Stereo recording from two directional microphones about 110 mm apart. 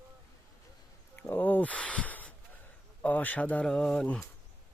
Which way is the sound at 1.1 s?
20° left (ahead or behind).